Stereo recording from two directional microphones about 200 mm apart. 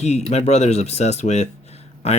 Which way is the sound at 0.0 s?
35° left (ahead or behind).